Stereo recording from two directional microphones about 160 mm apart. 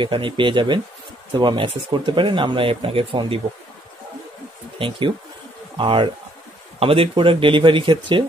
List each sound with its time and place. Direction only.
0.0 s speech: 30° right (ahead or behind)
4.7 s speech: 30° right (ahead or behind)